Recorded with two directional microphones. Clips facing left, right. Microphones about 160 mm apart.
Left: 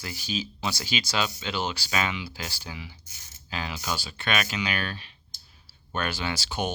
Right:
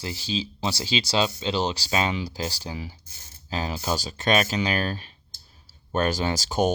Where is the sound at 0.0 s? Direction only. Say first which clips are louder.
Right 3 dB; 30° right (ahead or behind).